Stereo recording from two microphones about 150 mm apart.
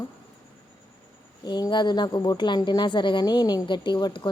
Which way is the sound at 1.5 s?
30° left (ahead or behind).